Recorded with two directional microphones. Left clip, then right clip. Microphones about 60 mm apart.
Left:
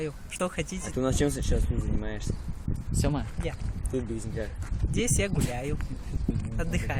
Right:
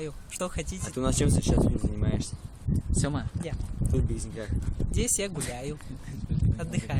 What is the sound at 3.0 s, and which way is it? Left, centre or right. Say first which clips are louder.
Speech: left 3 dB; right.